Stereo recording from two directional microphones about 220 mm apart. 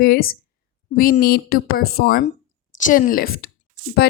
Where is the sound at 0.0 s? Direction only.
45° left (ahead or behind).